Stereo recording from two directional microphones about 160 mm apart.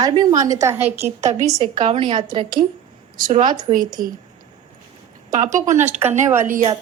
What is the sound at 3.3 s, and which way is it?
Speech, 50° right (ahead or behind).